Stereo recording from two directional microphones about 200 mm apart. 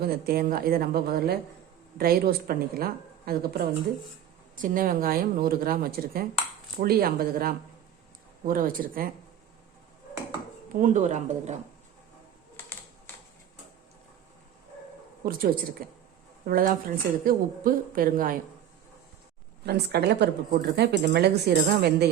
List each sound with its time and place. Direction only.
0.0 s speech: 50° right (ahead or behind)
10.8 s speech: 40° right (ahead or behind)
15.2 s speech: 45° right (ahead or behind)
19.6 s speech: 55° right (ahead or behind)